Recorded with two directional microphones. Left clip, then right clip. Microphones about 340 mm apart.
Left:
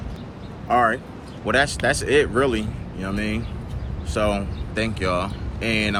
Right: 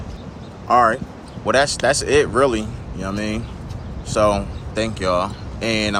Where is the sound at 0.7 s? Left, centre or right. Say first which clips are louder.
Right 4 dB; centre.